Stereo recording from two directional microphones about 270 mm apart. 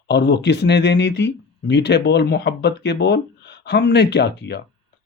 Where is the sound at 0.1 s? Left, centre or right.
Left.